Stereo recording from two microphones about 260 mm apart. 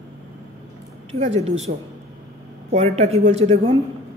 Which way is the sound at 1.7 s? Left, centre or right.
Right.